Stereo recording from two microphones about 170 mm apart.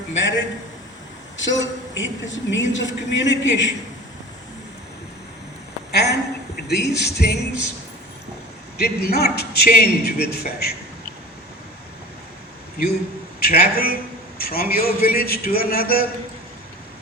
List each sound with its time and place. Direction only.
0.2 s a sound: 90° left
1.4 s a woman's voice: 90° left
5.9 s a man's voice: 75° left (ahead or behind)
8.8 s a man's voice: 65° left (ahead or behind)
12.7 s a man's voice: 60° left (ahead or behind)